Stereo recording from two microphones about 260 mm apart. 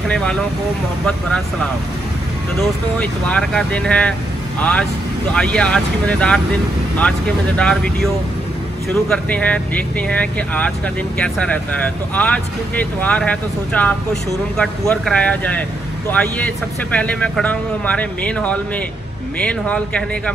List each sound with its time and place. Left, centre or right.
0.1 s speech: centre
9.1 s speech: centre